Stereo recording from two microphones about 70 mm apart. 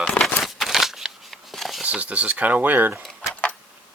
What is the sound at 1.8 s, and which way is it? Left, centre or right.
Speech, centre.